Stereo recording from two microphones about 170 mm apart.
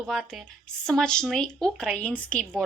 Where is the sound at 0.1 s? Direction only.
Centre (ahead or behind).